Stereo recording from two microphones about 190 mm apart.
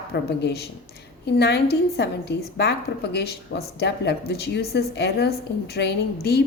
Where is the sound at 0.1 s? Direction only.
60° left (ahead or behind).